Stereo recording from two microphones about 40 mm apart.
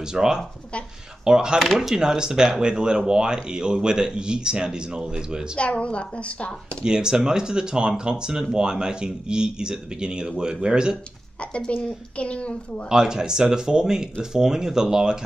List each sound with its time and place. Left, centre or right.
0.1 s speech: centre
5.6 s a woman's voice: left
6.8 s speech: centre
12.2 s a woman's voice: left
12.9 s speech: centre